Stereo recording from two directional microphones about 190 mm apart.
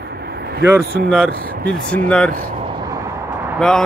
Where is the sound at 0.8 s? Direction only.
55° right (ahead or behind).